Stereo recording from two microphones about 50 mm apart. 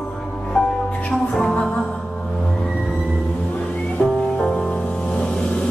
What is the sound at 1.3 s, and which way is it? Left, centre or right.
Music, centre.